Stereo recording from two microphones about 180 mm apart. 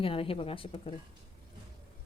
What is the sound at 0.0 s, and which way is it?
Speech, 30° left (ahead or behind).